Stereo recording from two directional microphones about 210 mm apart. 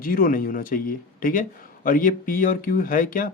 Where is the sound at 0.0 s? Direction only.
40° left (ahead or behind).